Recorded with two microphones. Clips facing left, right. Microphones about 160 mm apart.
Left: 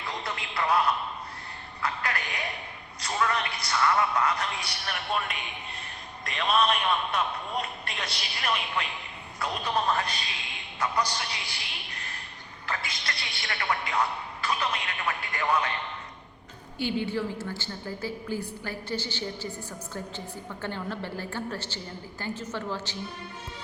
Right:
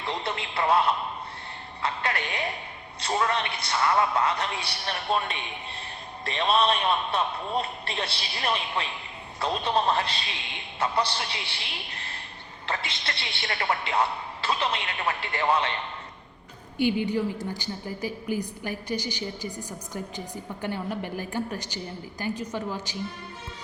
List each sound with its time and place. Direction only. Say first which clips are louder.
0.0 s a sound: right 4 dB; 30° right (ahead or behind)
6.2 s a woman's voice: right 2 dB; 30° right (ahead or behind)
16.7 s a woman's voice: right 4 dB; 15° right (ahead or behind)